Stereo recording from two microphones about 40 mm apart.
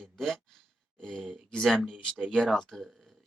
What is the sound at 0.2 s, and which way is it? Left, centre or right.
Sigh, centre.